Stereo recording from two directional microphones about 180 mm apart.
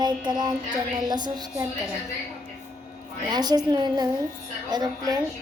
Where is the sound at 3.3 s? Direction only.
20° right (ahead or behind).